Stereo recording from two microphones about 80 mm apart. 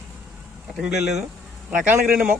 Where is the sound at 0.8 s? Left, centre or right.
Centre.